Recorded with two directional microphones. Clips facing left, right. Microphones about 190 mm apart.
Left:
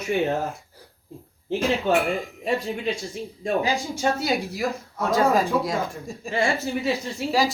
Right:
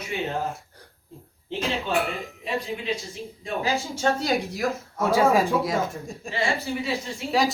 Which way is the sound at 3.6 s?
10° left (ahead or behind).